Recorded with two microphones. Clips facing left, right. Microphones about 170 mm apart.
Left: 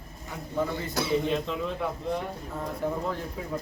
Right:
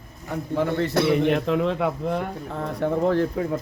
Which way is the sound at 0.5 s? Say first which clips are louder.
Right 7 dB; 75° right (ahead or behind).